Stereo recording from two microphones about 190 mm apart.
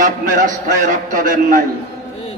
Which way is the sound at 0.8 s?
45° right (ahead or behind).